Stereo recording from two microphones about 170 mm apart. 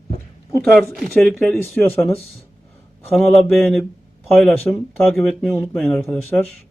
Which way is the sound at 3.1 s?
Centre (ahead or behind).